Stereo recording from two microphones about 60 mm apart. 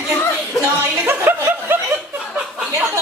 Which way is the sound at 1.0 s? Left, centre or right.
Right.